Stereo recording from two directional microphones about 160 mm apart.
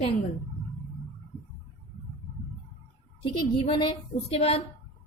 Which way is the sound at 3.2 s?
30° left (ahead or behind).